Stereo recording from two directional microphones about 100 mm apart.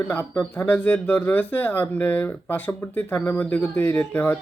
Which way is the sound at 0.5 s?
20° left (ahead or behind).